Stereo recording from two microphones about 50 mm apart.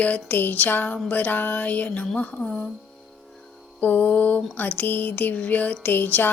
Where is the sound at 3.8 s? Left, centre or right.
Left.